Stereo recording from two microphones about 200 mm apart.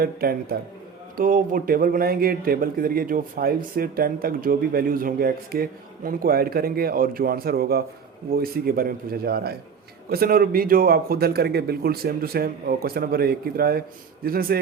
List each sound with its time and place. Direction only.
0.0 s speech: 50° right (ahead or behind)